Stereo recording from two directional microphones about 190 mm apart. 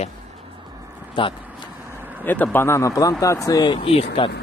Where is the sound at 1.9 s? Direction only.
10° right (ahead or behind).